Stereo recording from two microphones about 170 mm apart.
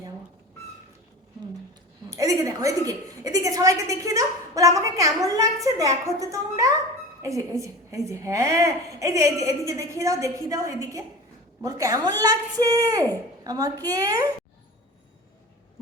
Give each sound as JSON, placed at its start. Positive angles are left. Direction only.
{"t": 2.0, "sound": "a woman's voice", "side_deg": -20}